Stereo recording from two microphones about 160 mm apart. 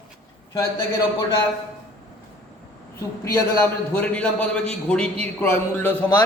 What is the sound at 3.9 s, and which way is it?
A man's voice, 10° left (ahead or behind).